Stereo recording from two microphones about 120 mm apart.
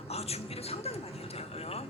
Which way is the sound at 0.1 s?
60° left (ahead or behind).